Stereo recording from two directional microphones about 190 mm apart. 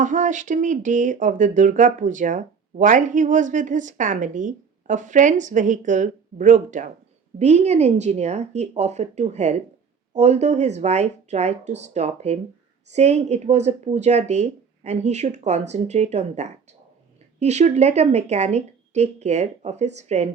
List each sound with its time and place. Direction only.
0.0 s speech: 40° right (ahead or behind)